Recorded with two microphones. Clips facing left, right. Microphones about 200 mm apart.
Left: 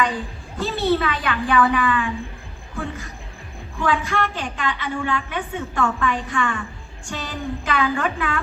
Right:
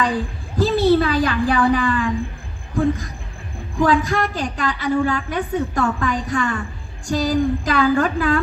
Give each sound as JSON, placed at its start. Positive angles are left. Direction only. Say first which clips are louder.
{"t": 0.5, "sound": "a woman's voice", "louder": "right 6 dB", "side_deg": -35}
{"t": 3.8, "sound": "a woman's voice", "louder": "right 5 dB", "side_deg": -40}